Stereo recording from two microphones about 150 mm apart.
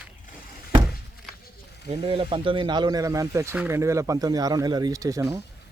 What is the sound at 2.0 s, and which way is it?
Speech, 35° right (ahead or behind).